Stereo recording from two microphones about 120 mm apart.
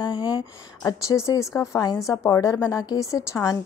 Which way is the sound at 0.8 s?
25° left (ahead or behind).